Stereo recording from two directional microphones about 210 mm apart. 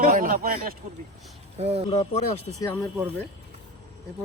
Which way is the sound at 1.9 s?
30° left (ahead or behind).